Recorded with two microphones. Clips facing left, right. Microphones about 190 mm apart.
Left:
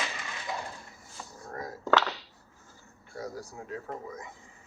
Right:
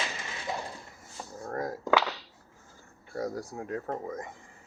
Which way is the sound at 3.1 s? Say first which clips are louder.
Right 5 dB; 55° right (ahead or behind).